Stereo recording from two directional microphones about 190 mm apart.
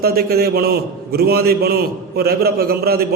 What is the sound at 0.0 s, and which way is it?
A man's voice, 55° right (ahead or behind).